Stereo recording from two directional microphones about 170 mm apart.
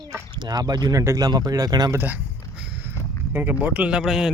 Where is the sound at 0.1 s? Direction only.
25° right (ahead or behind).